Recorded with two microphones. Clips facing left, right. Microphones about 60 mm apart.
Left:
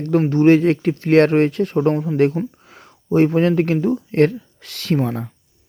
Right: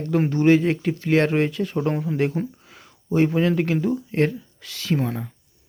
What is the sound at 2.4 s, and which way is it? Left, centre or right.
Speech, centre.